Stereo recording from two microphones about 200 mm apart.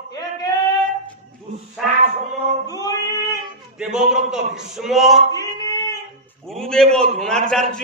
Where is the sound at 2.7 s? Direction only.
20° left (ahead or behind).